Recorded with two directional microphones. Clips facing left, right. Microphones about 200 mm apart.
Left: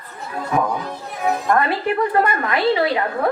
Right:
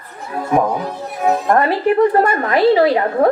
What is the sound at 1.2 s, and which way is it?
A woman's voice, 40° right (ahead or behind).